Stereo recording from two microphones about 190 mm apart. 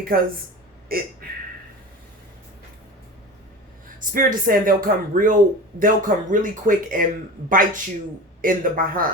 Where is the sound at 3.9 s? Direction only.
45° right (ahead or behind).